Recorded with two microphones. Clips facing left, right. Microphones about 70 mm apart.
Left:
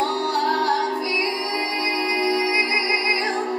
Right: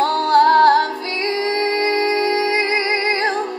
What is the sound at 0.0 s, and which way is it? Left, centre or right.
Music, right.